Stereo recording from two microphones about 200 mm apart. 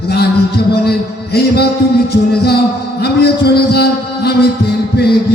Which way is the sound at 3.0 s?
55° left (ahead or behind).